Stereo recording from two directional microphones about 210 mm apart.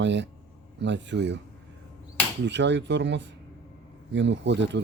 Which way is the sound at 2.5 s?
60° right (ahead or behind).